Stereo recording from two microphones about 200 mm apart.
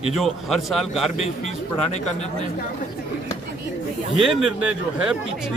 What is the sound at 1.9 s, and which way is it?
Speech, 35° left (ahead or behind).